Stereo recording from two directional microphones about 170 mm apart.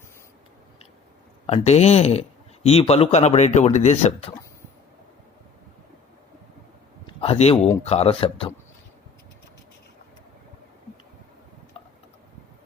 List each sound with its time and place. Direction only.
1.5 s speech: 40° left (ahead or behind)
7.1 s a sound: 35° left (ahead or behind)
7.9 s speech: 35° left (ahead or behind)